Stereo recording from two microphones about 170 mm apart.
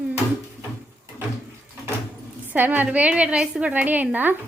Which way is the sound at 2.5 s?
10° right (ahead or behind).